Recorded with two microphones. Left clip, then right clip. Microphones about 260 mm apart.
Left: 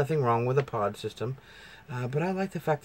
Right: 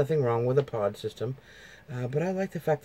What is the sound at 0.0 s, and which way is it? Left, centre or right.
Speech, centre.